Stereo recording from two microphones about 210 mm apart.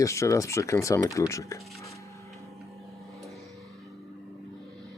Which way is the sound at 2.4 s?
Centre (ahead or behind).